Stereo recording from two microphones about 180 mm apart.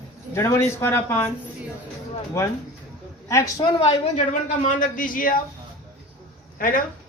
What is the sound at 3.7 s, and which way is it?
Speech, 35° left (ahead or behind).